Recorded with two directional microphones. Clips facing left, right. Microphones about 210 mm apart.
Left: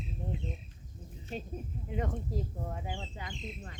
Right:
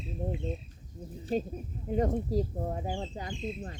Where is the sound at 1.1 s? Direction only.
35° right (ahead or behind).